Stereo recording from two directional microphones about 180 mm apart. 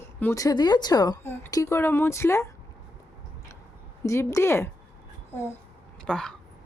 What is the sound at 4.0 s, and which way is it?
Speech, 15° left (ahead or behind).